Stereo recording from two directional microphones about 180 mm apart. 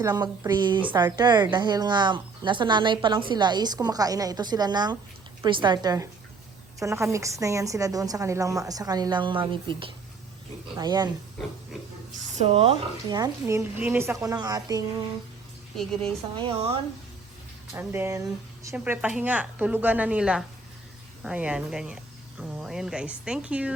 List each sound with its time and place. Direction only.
0.0 s a woman's voice: 20° right (ahead or behind)
12.4 s speech: 30° right (ahead or behind)
13.1 s speech: 15° right (ahead or behind)
16.4 s speech: 30° right (ahead or behind)
17.7 s speech: 15° right (ahead or behind)